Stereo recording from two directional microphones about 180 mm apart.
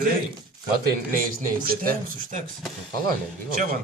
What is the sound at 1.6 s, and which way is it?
Speech, 50° right (ahead or behind).